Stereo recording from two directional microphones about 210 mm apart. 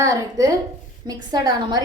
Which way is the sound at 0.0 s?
15° right (ahead or behind).